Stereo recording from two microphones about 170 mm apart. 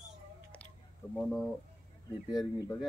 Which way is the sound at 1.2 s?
Centre (ahead or behind).